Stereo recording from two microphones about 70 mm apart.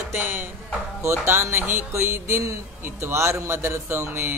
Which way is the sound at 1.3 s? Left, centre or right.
Right.